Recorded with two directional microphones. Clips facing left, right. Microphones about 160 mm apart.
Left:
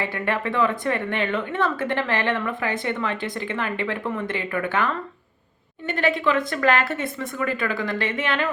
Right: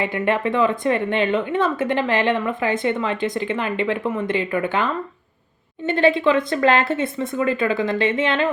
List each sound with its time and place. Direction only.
0.0 s a woman's voice: 20° right (ahead or behind)